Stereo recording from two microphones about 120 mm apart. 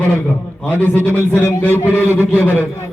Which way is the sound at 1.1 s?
20° right (ahead or behind).